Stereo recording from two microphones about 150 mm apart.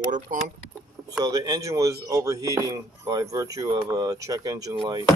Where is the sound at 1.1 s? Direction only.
25° right (ahead or behind).